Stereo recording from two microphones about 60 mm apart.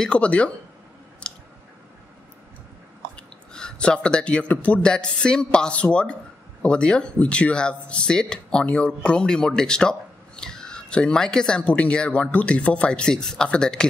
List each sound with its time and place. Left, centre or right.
0.0 s speech: centre
1.2 s a sound: centre
3.2 s speech: centre